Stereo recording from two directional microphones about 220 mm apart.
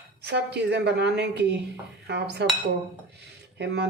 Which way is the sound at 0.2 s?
50° right (ahead or behind).